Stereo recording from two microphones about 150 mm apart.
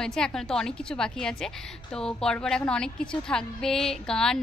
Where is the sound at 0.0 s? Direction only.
5° left (ahead or behind).